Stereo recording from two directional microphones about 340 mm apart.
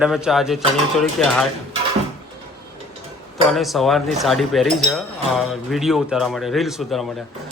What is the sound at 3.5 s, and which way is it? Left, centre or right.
Speech, centre.